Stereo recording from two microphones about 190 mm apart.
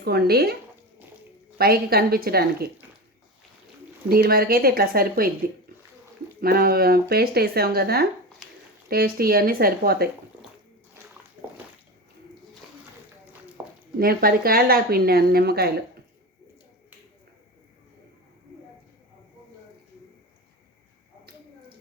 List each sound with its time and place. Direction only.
0.0 s speech: 55° right (ahead or behind)
1.5 s a woman's voice: 55° right (ahead or behind)
4.1 s a woman's voice: 55° right (ahead or behind)
13.6 s a sound: 10° right (ahead or behind)
14.0 s a woman's voice: 50° right (ahead or behind)